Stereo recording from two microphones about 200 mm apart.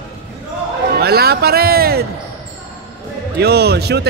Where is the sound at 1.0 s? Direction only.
50° right (ahead or behind).